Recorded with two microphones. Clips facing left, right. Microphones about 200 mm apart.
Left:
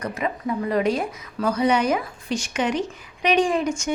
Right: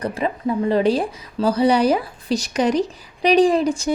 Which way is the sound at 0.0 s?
30° right (ahead or behind).